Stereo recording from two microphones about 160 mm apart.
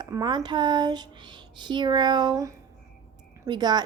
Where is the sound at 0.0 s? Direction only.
25° right (ahead or behind).